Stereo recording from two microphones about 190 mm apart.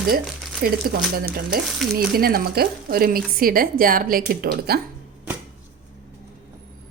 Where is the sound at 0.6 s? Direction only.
50° right (ahead or behind).